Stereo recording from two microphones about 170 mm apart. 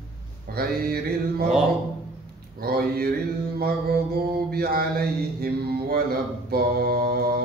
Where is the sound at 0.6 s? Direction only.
65° right (ahead or behind).